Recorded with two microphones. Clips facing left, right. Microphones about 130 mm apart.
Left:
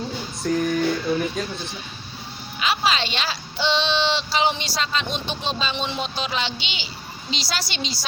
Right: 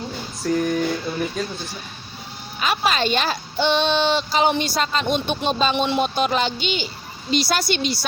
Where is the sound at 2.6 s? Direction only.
50° right (ahead or behind).